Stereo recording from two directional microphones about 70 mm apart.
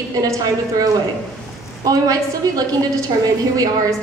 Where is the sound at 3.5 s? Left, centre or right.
Right.